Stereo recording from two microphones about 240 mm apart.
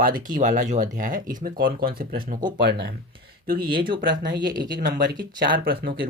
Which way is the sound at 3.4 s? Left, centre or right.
Right.